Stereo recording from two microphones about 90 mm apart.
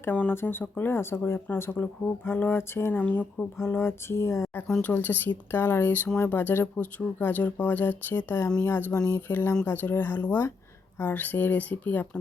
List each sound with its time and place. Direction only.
0.1 s speech: 15° left (ahead or behind)
3.6 s a sound: 30° left (ahead or behind)
4.8 s speech: 20° left (ahead or behind)